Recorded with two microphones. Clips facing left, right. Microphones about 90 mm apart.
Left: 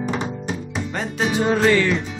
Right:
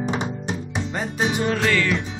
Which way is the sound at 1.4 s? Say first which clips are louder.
Left 6 dB; 20° left (ahead or behind).